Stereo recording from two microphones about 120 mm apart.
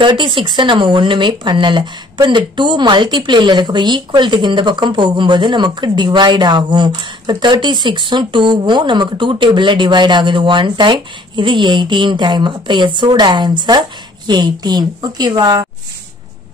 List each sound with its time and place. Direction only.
0.0 s speech: 40° right (ahead or behind)